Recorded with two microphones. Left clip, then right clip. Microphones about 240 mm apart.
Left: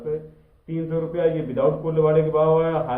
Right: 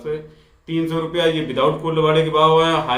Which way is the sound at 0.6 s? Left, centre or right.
Centre.